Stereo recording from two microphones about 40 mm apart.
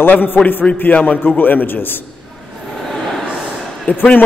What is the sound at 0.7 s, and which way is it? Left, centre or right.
Speech, left.